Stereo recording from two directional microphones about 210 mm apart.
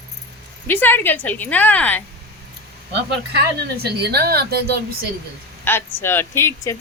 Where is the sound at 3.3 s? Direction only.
50° right (ahead or behind).